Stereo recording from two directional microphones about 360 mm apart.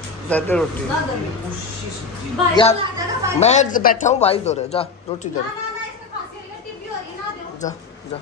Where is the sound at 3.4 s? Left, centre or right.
Centre.